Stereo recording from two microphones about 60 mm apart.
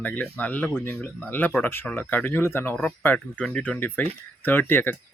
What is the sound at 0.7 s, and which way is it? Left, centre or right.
Speech, left.